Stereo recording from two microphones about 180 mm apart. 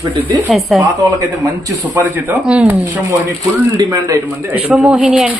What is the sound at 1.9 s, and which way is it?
Speech, 5° right (ahead or behind).